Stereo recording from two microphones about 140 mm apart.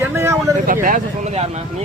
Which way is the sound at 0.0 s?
20° right (ahead or behind).